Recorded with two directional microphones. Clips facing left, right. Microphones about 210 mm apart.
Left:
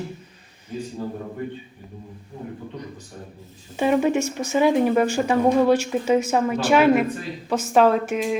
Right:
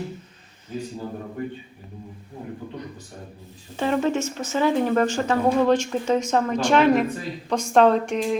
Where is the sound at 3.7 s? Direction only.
10° left (ahead or behind).